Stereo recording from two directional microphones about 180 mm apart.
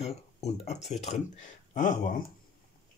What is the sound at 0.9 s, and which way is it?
Speech, 40° left (ahead or behind).